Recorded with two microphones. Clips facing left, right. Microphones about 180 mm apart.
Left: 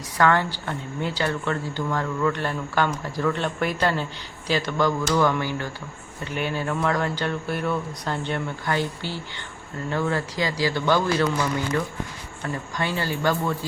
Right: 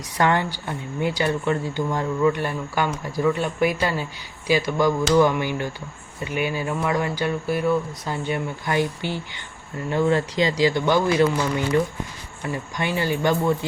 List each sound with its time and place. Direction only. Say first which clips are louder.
0.2 s speech: even; 20° right (ahead or behind)
12.7 s speech: right 3 dB; 15° right (ahead or behind)